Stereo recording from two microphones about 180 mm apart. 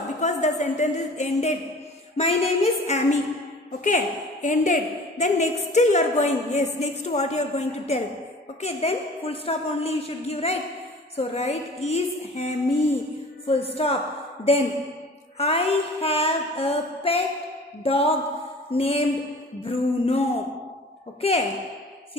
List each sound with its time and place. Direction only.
0.2 s a woman's voice: 40° left (ahead or behind)